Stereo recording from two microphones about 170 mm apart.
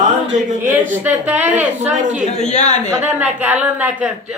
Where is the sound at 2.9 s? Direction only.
10° right (ahead or behind).